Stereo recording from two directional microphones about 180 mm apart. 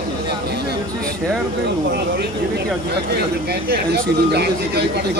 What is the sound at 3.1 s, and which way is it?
Speech, 65° right (ahead or behind).